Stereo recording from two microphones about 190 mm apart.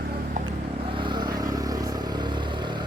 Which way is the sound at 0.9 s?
25° right (ahead or behind).